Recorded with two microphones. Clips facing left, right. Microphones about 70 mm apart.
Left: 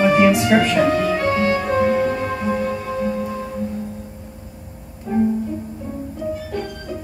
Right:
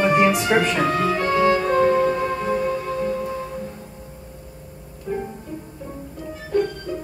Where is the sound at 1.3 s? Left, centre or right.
Centre.